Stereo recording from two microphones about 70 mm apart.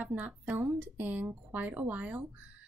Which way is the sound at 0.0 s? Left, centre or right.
Centre.